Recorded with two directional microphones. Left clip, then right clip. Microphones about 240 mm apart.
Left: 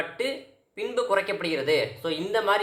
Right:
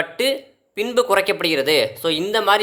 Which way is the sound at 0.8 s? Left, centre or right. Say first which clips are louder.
Right 8 dB; right.